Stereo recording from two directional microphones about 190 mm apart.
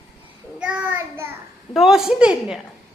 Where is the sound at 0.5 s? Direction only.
5° right (ahead or behind).